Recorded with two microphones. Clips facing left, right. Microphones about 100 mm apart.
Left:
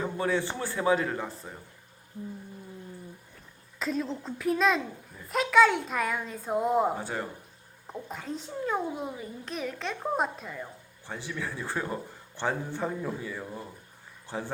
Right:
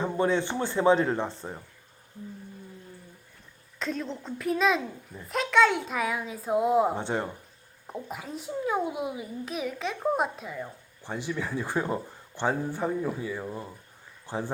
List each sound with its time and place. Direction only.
0.0 s speech: 20° right (ahead or behind)
3.8 s a child's voice: centre (ahead or behind)
6.9 s speech: 25° right (ahead or behind)
7.9 s a child's voice: 5° right (ahead or behind)
11.0 s speech: 15° right (ahead or behind)